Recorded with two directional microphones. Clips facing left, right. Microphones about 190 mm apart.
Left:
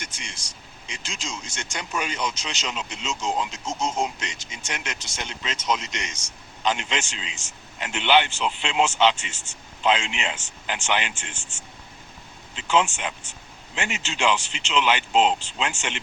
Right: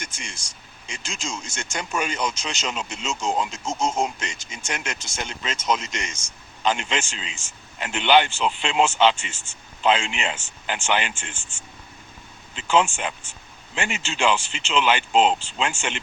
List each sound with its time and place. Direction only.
0.0 s speech: 50° right (ahead or behind)
12.5 s speech: 45° right (ahead or behind)